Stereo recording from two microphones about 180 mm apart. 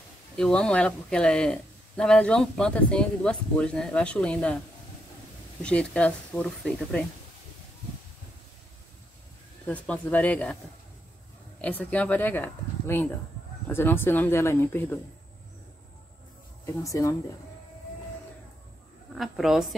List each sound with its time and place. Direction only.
0.4 s a man's voice: 5° left (ahead or behind)
5.6 s speech: 5° left (ahead or behind)
9.7 s speech: 10° left (ahead or behind)
11.6 s speech: 10° left (ahead or behind)
16.6 s speech: 15° left (ahead or behind)
19.1 s a man's voice: centre (ahead or behind)